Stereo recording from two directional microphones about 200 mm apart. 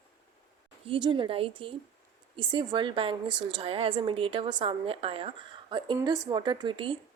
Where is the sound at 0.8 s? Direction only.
25° right (ahead or behind).